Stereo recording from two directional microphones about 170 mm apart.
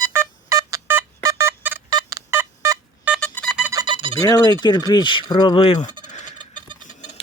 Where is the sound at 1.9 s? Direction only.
25° right (ahead or behind).